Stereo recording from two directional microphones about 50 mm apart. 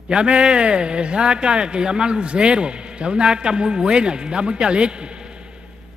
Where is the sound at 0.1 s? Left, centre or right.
Centre.